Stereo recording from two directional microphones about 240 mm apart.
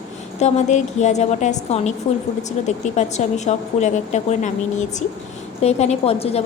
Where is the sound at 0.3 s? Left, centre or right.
Left.